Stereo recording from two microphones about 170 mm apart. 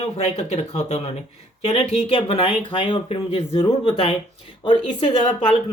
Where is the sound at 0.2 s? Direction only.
40° left (ahead or behind).